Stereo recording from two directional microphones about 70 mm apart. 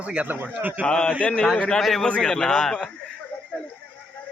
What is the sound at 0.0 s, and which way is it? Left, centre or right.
Speech, centre.